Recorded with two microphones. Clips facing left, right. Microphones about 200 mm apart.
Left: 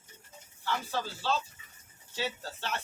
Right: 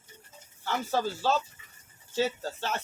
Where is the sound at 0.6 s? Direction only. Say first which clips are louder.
Right 5 dB; 45° right (ahead or behind).